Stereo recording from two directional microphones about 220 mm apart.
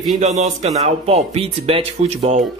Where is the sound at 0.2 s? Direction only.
35° right (ahead or behind).